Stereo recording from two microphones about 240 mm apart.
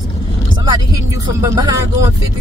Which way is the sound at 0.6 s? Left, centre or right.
Centre.